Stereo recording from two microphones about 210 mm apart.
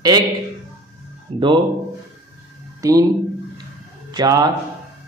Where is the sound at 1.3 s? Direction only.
30° right (ahead or behind).